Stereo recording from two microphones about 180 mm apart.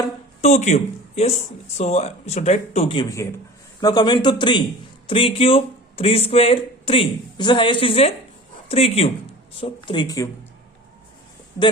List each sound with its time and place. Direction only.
0.4 s speech: 40° left (ahead or behind)
3.0 s a man's voice: 20° left (ahead or behind)